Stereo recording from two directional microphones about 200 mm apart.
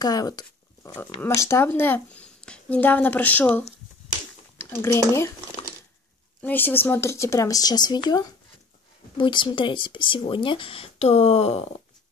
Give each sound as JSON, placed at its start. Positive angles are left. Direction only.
{"t": 0.0, "sound": "speech", "side_deg": 20}
{"t": 6.4, "sound": "speech", "side_deg": 10}